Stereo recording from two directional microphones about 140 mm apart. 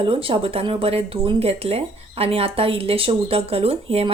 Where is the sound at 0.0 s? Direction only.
40° right (ahead or behind).